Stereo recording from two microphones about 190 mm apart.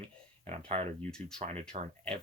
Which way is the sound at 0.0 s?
35° right (ahead or behind).